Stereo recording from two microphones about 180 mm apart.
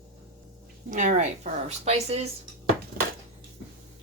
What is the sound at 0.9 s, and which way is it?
A woman's voice, 45° right (ahead or behind).